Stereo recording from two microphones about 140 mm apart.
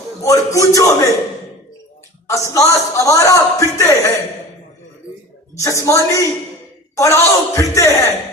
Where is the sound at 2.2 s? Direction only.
20° left (ahead or behind).